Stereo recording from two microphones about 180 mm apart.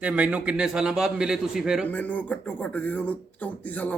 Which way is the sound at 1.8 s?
10° left (ahead or behind).